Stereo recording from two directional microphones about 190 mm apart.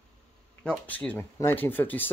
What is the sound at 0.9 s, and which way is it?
Speech, 10° left (ahead or behind).